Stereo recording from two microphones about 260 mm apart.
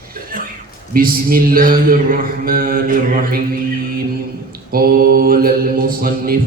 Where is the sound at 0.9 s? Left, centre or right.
Right.